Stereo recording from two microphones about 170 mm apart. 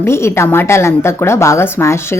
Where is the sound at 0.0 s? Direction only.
15° left (ahead or behind).